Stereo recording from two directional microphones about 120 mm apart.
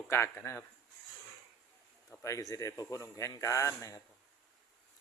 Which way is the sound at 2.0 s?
25° left (ahead or behind).